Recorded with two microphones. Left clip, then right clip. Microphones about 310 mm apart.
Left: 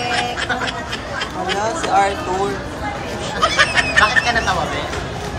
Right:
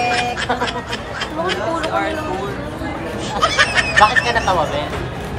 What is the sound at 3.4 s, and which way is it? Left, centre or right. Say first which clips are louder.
Speech: even; centre.